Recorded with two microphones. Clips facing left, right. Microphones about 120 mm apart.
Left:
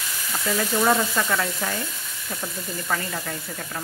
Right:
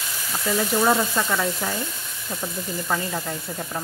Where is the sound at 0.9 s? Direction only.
15° right (ahead or behind).